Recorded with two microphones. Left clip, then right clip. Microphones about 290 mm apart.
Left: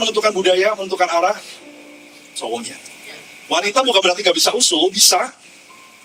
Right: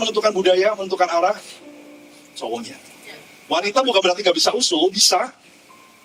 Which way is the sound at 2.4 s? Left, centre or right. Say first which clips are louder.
Left 3 dB; right.